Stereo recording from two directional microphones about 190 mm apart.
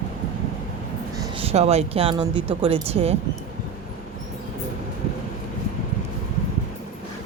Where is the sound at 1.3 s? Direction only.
30° right (ahead or behind).